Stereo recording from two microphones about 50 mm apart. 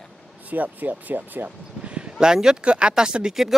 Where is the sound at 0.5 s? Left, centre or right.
Right; by 3.4 s centre.